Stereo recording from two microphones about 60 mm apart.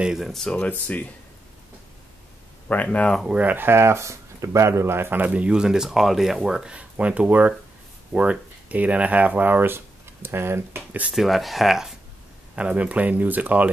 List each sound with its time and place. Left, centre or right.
0.2 s speech: centre
0.5 s speech: left
2.7 s speech: left
3.3 s speech: right
5.2 s speech: right
6.8 s speech: right
11.1 s speech: centre
12.5 s speech: right